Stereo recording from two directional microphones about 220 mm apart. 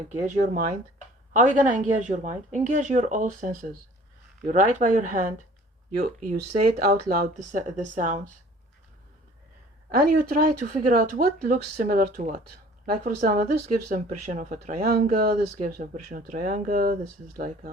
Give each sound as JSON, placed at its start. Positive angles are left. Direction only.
{"t": 0.1, "sound": "speech", "side_deg": -30}
{"t": 9.9, "sound": "speech", "side_deg": -40}